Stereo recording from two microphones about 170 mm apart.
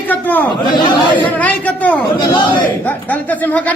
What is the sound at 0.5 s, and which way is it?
Speech, 25° left (ahead or behind).